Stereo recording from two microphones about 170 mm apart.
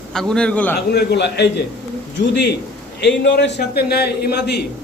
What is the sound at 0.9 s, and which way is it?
Speech, 80° left.